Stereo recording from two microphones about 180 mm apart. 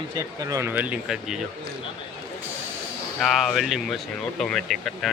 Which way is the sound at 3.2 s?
Centre (ahead or behind).